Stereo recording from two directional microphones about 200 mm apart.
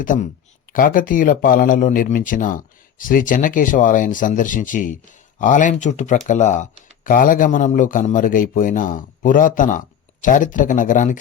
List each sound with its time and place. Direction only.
0.0 s speech: 40° left (ahead or behind)